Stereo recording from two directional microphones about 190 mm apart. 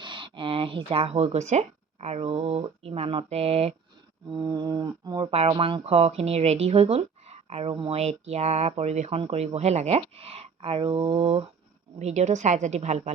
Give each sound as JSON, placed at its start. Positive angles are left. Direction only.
{"t": 0.0, "sound": "speech", "side_deg": -25}
{"t": 4.4, "sound": "speech", "side_deg": -20}